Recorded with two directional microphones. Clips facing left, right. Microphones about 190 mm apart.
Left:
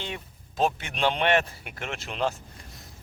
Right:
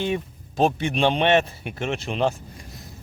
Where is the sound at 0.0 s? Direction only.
15° right (ahead or behind).